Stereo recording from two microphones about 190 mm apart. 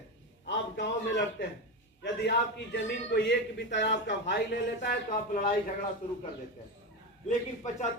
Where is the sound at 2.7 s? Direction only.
65° left (ahead or behind).